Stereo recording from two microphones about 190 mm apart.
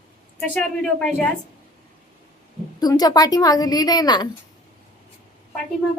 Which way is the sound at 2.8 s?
20° left (ahead or behind).